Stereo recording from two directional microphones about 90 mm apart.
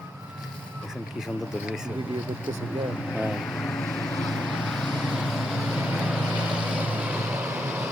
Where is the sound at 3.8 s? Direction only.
5° left (ahead or behind).